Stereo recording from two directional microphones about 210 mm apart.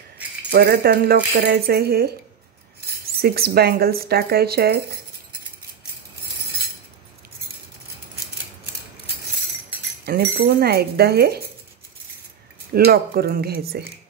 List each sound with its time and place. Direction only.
0.5 s speech: 50° right (ahead or behind)
3.2 s speech: 45° right (ahead or behind)
10.0 s speech: 50° right (ahead or behind)
12.7 s speech: 45° right (ahead or behind)